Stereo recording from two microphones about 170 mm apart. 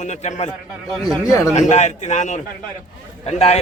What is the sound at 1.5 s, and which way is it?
A man's voice, 40° left (ahead or behind).